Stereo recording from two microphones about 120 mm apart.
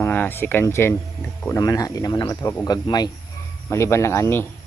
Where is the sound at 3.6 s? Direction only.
25° left (ahead or behind).